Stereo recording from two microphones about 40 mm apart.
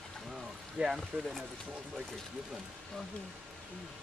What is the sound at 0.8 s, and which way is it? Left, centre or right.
Speech, right.